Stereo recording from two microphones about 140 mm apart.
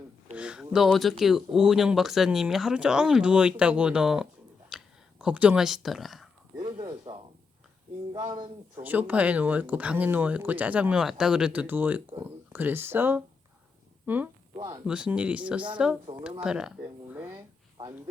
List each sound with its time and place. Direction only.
0.3 s speech: 5° right (ahead or behind)
4.7 s a sound: 5° right (ahead or behind)
5.2 s speech: 10° right (ahead or behind)
6.8 s a sound: 35° right (ahead or behind)
8.1 s speech: 25° right (ahead or behind)
8.8 s speech: 10° right (ahead or behind)
14.5 s speech: 30° right (ahead or behind)
14.8 s speech: 5° right (ahead or behind)
16.1 s speech: 35° right (ahead or behind)
16.4 s speech: 5° right (ahead or behind)
17.1 s a sound: 15° right (ahead or behind)